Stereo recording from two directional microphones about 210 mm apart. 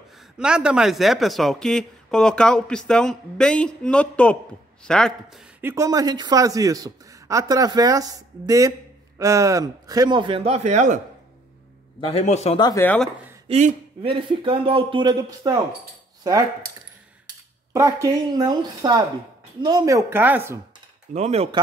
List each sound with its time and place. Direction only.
0.4 s speech: 5° right (ahead or behind)
5.6 s a man's voice: 15° right (ahead or behind); by 11.0 s 35° right (ahead or behind)
12.0 s speech: 30° left (ahead or behind)
12.8 s speech: 5° left (ahead or behind)
13.5 s speech: 25° right (ahead or behind)
17.7 s a man's voice: 15° right (ahead or behind)
21.1 s speech: 30° right (ahead or behind)